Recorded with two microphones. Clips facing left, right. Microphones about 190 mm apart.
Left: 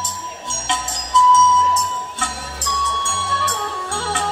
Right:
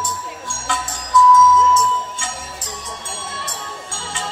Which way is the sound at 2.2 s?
75° left (ahead or behind).